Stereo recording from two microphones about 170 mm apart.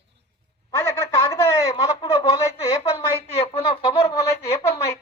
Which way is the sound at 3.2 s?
30° left (ahead or behind).